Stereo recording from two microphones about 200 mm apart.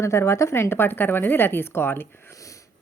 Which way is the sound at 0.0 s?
15° left (ahead or behind).